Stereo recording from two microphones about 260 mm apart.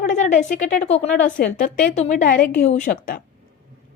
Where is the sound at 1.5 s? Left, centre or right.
Left.